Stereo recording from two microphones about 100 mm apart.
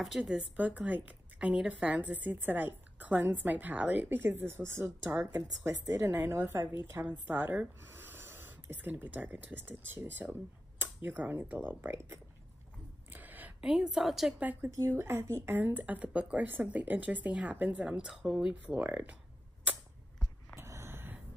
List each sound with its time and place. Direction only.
0.2 s a woman's voice: 15° right (ahead or behind)
13.1 s a sound: 15° right (ahead or behind)
13.6 s a woman's voice: 5° right (ahead or behind)
14.4 s a woman's voice: 15° right (ahead or behind)
14.7 s a woman's voice: 30° right (ahead or behind)
20.5 s a sound: 30° right (ahead or behind)